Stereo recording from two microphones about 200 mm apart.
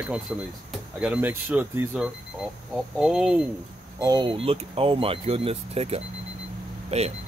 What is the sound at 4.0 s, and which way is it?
Speech, 20° right (ahead or behind).